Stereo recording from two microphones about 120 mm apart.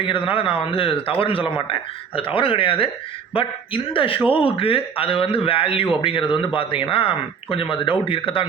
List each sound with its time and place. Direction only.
0.0 s a man's voice: 45° left (ahead or behind)